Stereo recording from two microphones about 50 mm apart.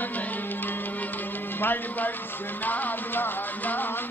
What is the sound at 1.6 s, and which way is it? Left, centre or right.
Speech, left.